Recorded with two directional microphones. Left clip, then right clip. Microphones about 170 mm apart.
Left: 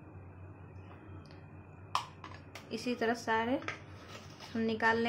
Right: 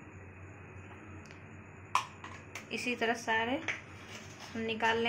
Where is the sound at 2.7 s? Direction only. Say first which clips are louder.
Right 1 dB; 30° left (ahead or behind).